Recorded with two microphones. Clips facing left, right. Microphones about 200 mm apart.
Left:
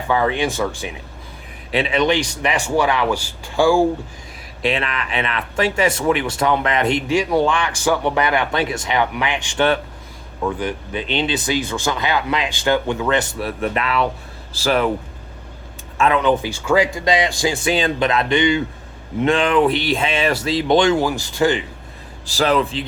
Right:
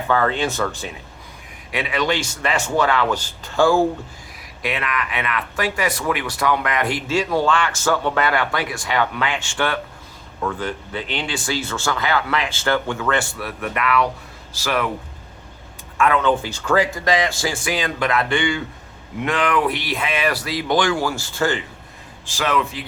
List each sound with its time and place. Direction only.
0.1 s speech: 15° left (ahead or behind)
1.7 s speech: 25° left (ahead or behind)
4.6 s a man's voice: 25° left (ahead or behind)
16.0 s speech: 20° left (ahead or behind)
22.3 s a man's voice: 35° left (ahead or behind)